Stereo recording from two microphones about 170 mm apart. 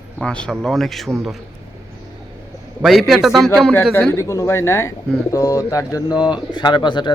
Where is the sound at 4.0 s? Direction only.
15° left (ahead or behind).